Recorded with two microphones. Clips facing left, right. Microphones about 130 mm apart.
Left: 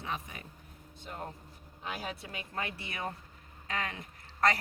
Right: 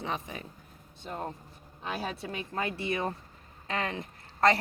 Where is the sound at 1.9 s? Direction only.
30° right (ahead or behind).